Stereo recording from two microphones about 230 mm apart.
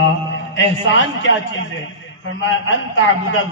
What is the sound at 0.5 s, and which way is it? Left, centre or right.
A man's voice, left.